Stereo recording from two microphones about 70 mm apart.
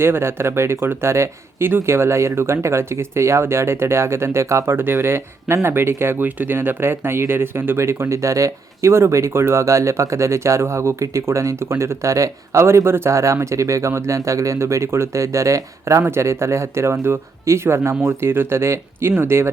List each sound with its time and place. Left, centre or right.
0.0 s speech: right